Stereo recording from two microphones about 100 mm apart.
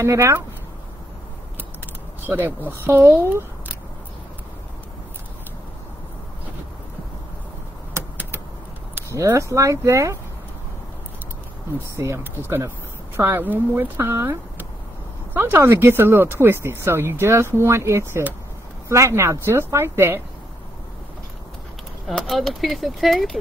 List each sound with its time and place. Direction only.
0.0 s speech: 30° right (ahead or behind)
2.2 s speech: 20° right (ahead or behind)
7.9 s vehicle: 20° right (ahead or behind)
9.1 s speech: 30° right (ahead or behind)
11.9 s speech: 25° right (ahead or behind)
22.0 s speech: centre (ahead or behind)